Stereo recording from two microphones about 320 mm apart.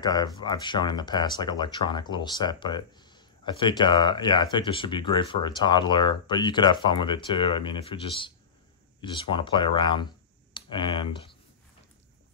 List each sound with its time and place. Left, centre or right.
0.0 s speech: centre